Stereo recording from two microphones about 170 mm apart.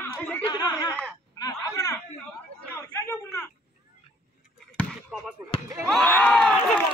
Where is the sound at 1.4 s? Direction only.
20° left (ahead or behind).